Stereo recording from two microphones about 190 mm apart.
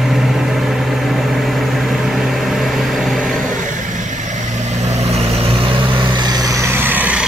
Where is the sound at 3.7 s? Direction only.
40° right (ahead or behind); by 7.3 s 5° right (ahead or behind).